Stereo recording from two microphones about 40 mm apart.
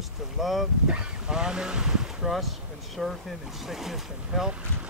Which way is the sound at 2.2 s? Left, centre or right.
Centre.